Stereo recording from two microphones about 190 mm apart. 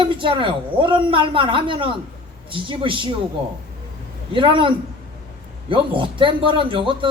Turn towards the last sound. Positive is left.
turn(degrees=-25)  # may be behind; listen again after turning